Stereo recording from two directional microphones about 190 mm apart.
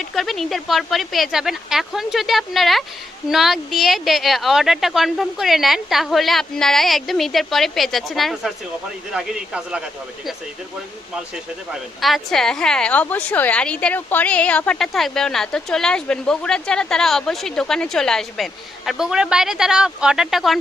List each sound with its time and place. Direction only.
0.0 s a woman's voice: centre (ahead or behind)
11.7 s a woman's voice: centre (ahead or behind)